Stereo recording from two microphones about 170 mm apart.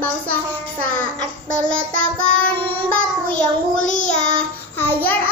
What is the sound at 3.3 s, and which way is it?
Child singing, 45° left (ahead or behind).